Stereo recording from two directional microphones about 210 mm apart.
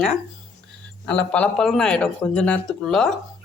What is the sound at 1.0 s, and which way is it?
Speech, 5° left (ahead or behind).